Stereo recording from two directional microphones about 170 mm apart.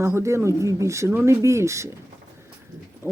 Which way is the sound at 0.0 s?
15° right (ahead or behind).